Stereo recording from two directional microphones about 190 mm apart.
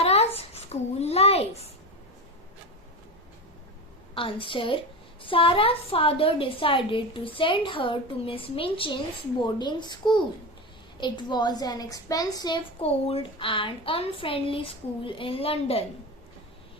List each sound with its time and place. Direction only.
0.0 s a sound: 35° left (ahead or behind)
0.3 s babbling: 35° left (ahead or behind)
4.1 s a woman's voice: 30° left (ahead or behind)